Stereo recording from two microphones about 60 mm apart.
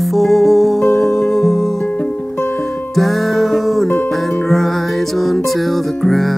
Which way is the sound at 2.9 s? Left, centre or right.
Centre.